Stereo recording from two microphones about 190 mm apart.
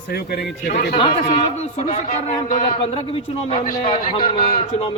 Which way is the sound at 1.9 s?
35° left (ahead or behind).